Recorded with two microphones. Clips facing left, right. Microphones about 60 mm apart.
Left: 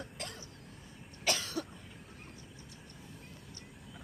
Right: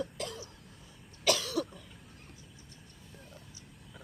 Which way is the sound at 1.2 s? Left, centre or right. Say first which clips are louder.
Right 5 dB; left.